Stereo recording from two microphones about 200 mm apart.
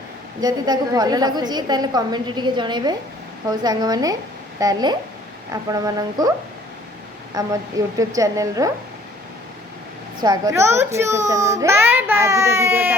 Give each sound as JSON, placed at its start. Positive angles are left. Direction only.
{"t": 0.4, "sound": "a woman's voice", "side_deg": -20}
{"t": 7.3, "sound": "a child's voice", "side_deg": -15}
{"t": 10.2, "sound": "a child's voice", "side_deg": -15}